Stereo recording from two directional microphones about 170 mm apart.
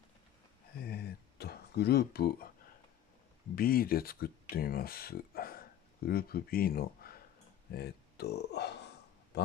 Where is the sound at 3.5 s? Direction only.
60° left (ahead or behind).